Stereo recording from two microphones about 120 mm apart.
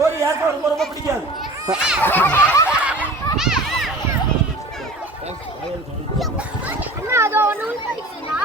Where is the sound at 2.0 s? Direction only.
15° left (ahead or behind).